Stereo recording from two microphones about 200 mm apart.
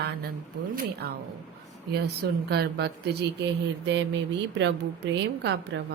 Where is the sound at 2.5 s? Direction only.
55° right (ahead or behind).